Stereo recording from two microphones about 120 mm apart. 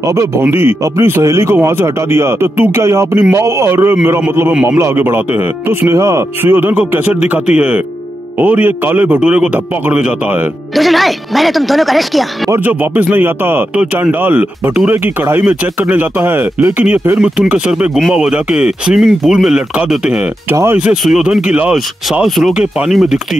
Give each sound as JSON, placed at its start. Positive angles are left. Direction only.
{"t": 0.0, "sound": "a man's voice", "side_deg": -25}
{"t": 12.4, "sound": "a man's voice", "side_deg": -15}
{"t": 20.4, "sound": "speech", "side_deg": -20}
{"t": 20.8, "sound": "a man's voice", "side_deg": -5}